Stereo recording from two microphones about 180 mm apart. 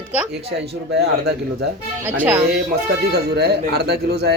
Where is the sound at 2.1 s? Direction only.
10° right (ahead or behind).